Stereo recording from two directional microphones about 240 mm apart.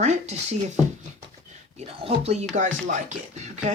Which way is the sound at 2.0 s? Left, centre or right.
Right.